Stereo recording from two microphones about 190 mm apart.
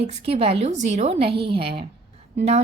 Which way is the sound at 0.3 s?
30° right (ahead or behind).